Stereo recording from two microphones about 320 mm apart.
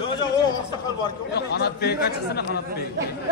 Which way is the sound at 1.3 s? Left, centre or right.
Left.